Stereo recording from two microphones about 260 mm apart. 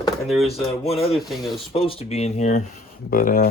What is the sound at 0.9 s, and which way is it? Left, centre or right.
Speech, left.